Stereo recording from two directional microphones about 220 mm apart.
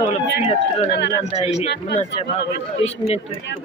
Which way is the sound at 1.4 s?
30° left (ahead or behind).